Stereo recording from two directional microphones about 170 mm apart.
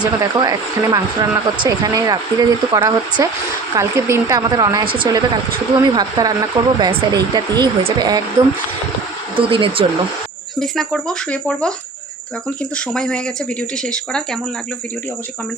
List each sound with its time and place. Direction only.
0.0 s a woman's voice: 25° right (ahead or behind)
9.3 s speech: 30° right (ahead or behind)
10.6 s speech: centre (ahead or behind)
12.7 s speech: 5° left (ahead or behind)